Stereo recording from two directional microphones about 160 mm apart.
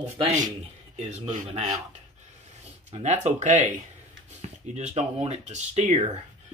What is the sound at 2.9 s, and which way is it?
Speech, 45° right (ahead or behind).